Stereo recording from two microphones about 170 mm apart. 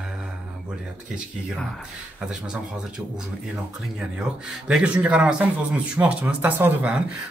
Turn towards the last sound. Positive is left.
turn(degrees=-10)  # may be behind; listen again after turning